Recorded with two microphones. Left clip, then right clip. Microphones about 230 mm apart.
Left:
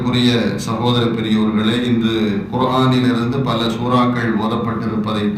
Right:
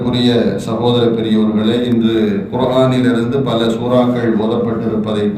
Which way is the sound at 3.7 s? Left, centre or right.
Left.